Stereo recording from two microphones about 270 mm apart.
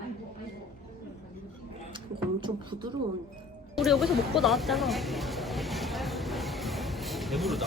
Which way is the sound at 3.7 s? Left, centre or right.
Centre.